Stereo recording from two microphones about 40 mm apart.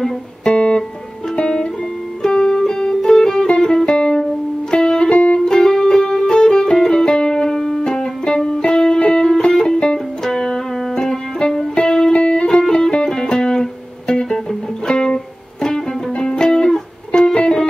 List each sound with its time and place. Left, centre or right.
0.5 s music: left